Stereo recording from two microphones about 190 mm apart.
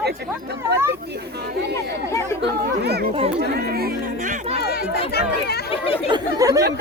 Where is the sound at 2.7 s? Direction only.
60° right (ahead or behind); by 4.5 s 40° right (ahead or behind).